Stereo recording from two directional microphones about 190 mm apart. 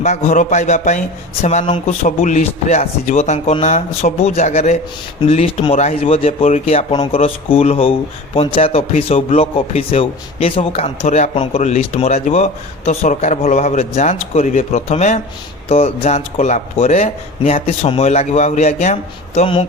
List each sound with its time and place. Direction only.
0.0 s speech: 40° left (ahead or behind)